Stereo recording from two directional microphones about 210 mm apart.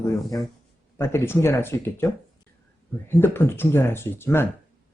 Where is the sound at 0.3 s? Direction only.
15° left (ahead or behind).